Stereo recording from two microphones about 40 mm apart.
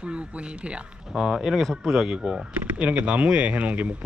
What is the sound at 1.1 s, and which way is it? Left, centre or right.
Speech, centre.